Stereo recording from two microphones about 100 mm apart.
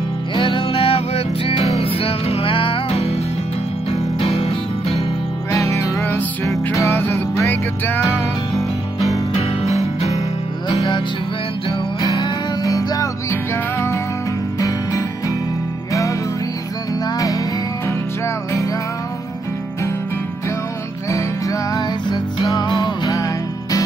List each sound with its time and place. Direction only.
0.4 s music: 55° left (ahead or behind); by 5.0 s 80° left
5.5 s music: 30° left (ahead or behind)
8.1 s music: 35° left (ahead or behind)
9.4 s music: 90° left
10.7 s music: 40° left (ahead or behind)
12.0 s music: 40° left (ahead or behind)
21.1 s music: 35° left (ahead or behind)